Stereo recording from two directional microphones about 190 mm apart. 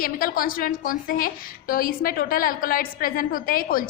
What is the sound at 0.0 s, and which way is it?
A woman's voice, 50° left (ahead or behind).